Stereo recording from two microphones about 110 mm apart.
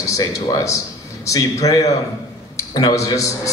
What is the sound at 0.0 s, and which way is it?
A man's voice, 30° left (ahead or behind).